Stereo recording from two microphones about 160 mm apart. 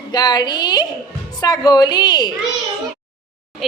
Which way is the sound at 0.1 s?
25° left (ahead or behind).